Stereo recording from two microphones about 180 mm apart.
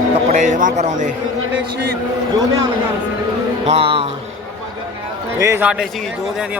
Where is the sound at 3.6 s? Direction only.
30° right (ahead or behind).